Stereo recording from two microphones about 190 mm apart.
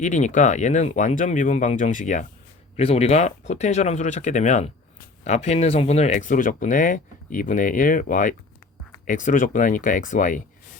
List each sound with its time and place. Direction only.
0.0 s speech: 40° left (ahead or behind)